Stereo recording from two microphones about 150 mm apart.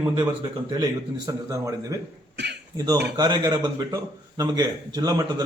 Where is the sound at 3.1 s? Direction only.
30° right (ahead or behind).